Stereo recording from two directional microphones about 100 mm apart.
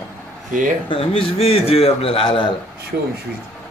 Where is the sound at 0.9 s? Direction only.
65° left (ahead or behind).